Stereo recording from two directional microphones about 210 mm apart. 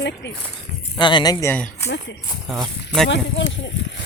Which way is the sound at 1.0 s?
20° left (ahead or behind).